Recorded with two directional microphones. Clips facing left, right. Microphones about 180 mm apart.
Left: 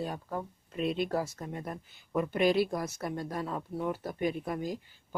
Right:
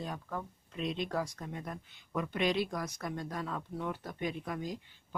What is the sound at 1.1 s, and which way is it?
Speech, 30° left (ahead or behind).